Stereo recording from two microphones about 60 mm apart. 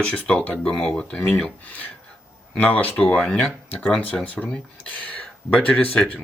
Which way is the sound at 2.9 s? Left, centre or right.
Centre.